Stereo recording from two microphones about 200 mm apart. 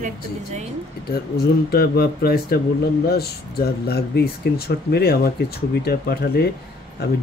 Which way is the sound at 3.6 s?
50° left (ahead or behind).